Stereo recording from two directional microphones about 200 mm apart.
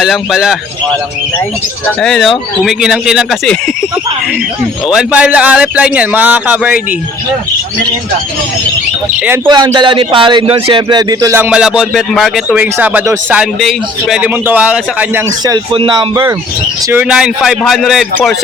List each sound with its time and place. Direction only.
0.0 s speech: centre (ahead or behind)
2.0 s speech: 5° left (ahead or behind)
4.9 s speech: 5° right (ahead or behind)
9.5 s speech: 20° right (ahead or behind)
15.4 s speech: 25° right (ahead or behind)
16.9 s speech: 5° right (ahead or behind)